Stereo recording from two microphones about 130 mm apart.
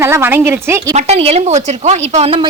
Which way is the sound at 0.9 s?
55° right (ahead or behind).